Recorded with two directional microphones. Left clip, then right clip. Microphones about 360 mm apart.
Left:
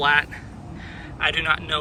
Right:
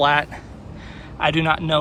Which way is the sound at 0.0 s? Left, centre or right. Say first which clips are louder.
Right 2 dB; centre.